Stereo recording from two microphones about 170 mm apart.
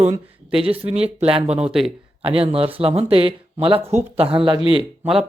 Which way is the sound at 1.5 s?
5° right (ahead or behind).